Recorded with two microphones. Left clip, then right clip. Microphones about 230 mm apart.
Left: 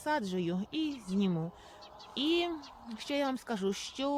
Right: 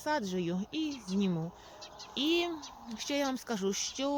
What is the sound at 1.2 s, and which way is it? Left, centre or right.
Speech, centre.